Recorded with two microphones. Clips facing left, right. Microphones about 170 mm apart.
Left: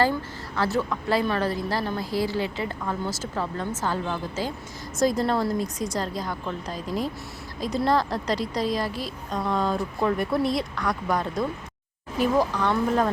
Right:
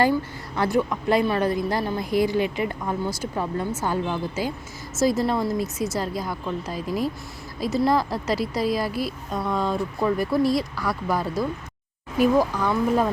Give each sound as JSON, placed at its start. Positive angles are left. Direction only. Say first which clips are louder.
{"t": 0.5, "sound": "a woman's voice", "louder": "right 3 dB", "side_deg": -15}